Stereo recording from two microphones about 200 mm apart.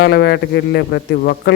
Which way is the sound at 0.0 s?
55° left (ahead or behind).